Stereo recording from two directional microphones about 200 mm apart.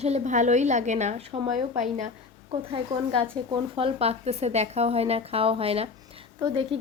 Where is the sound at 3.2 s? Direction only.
25° right (ahead or behind).